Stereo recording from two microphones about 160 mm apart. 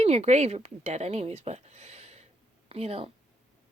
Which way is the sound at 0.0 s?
45° right (ahead or behind).